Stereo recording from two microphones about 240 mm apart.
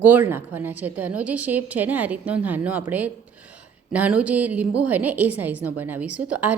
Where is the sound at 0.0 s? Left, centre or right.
Centre.